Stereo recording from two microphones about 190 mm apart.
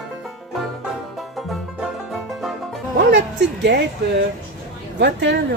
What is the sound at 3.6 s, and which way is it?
Speech, 65° right (ahead or behind).